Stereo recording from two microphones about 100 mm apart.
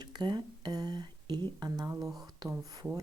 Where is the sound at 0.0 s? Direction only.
45° right (ahead or behind).